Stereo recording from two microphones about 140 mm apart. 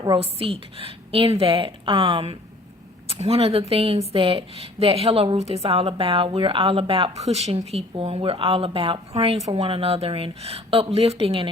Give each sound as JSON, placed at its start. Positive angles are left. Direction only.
{"t": 0.2, "sound": "a woman's voice", "side_deg": -45}